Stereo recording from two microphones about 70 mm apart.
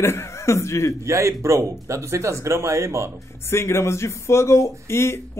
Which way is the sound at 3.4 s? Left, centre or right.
Left.